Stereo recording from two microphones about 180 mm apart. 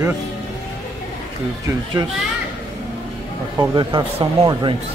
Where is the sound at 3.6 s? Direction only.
25° right (ahead or behind).